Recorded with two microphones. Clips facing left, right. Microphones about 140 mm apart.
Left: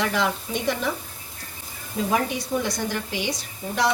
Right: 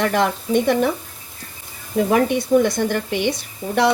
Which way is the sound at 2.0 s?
60° right (ahead or behind).